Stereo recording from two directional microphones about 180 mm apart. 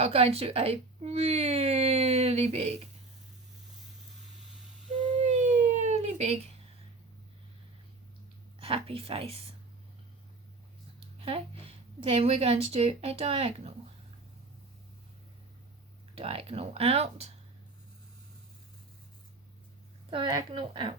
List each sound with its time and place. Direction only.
0.0 s speech: 30° right (ahead or behind)
5.2 s a sound: 40° right (ahead or behind)
8.5 s a woman's voice: 30° right (ahead or behind)
11.2 s a woman's voice: 30° right (ahead or behind)
16.1 s a woman's voice: 30° right (ahead or behind)
20.1 s speech: 30° right (ahead or behind)